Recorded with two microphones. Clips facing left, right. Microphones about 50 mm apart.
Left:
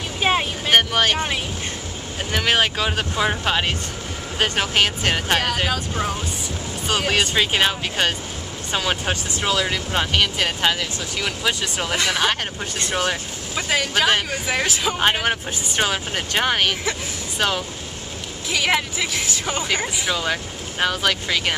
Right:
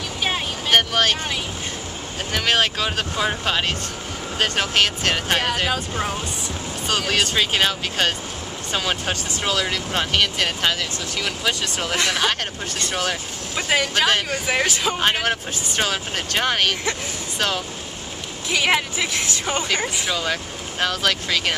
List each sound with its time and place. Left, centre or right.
0.2 s vehicle: left
0.7 s speech: centre
2.3 s speech: centre
5.4 s speech: centre
6.9 s speech: centre
13.6 s speech: centre
14.0 s speech: centre
18.5 s speech: centre